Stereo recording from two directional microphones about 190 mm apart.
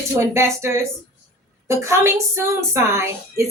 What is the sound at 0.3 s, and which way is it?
A woman's voice, 15° right (ahead or behind).